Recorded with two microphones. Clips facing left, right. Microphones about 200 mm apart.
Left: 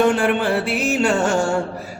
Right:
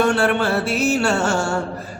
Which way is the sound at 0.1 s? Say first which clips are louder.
Even; 15° left (ahead or behind).